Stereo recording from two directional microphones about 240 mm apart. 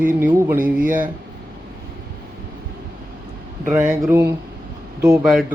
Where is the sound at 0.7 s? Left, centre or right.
Right.